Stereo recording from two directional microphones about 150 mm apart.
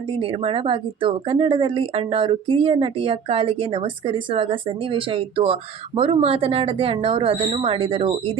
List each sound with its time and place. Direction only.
0.2 s a woman's voice: 35° right (ahead or behind)